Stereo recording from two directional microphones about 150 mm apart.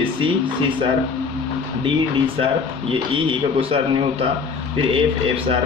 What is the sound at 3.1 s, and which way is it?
Speech, 35° right (ahead or behind).